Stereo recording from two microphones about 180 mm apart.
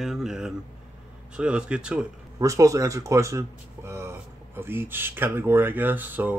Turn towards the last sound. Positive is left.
turn(degrees=-10)  # may be behind; listen again after turning